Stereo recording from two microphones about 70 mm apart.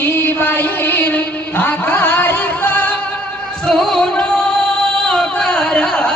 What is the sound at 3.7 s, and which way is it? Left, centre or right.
Music, centre.